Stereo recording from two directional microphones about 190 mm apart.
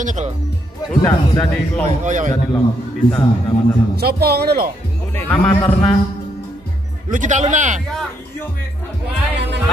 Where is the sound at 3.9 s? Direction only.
55° right (ahead or behind).